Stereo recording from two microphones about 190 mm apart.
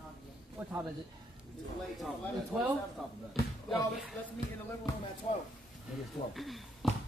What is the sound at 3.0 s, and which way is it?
Speech, centre (ahead or behind).